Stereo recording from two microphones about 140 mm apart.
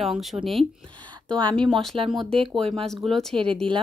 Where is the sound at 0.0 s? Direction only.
Centre (ahead or behind).